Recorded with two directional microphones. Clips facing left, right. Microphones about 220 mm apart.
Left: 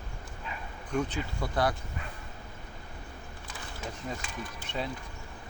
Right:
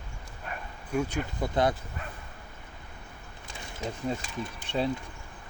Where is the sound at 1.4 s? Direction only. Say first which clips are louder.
Right 3 dB; 20° right (ahead or behind).